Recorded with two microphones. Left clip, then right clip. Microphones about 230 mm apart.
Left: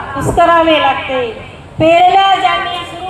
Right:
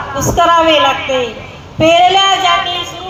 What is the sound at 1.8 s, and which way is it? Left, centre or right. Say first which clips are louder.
Female singing: left 1 dB; right.